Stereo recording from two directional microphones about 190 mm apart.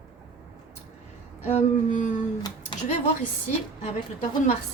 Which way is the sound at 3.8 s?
40° left (ahead or behind).